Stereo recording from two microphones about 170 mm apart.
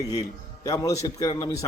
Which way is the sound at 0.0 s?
20° left (ahead or behind).